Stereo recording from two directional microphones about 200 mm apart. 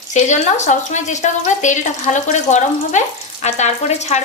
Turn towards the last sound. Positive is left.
turn(degrees=35)  # may be behind; listen again after turning